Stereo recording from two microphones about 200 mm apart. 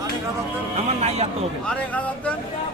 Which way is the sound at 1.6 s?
5° left (ahead or behind).